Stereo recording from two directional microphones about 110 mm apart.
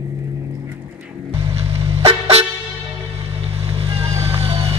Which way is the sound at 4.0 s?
30° right (ahead or behind).